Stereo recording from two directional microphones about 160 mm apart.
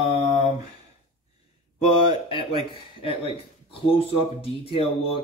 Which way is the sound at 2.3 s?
35° left (ahead or behind).